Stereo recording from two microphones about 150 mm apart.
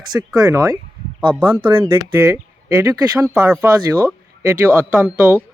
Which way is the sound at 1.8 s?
30° right (ahead or behind).